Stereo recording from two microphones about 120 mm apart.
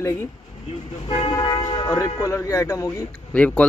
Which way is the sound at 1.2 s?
35° left (ahead or behind).